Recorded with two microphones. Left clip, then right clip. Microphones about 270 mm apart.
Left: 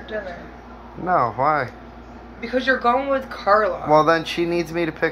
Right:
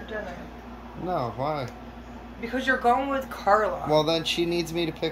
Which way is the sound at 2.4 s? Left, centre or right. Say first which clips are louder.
Left 5 dB; centre.